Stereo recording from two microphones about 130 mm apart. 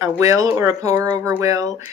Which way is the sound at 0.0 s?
25° right (ahead or behind).